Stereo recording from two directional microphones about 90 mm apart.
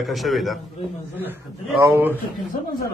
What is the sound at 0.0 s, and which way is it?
Speech, centre (ahead or behind).